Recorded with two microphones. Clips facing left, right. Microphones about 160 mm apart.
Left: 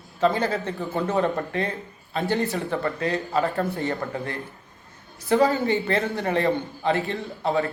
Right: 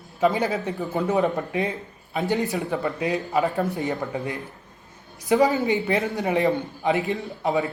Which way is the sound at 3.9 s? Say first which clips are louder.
Right 1 dB; centre (ahead or behind).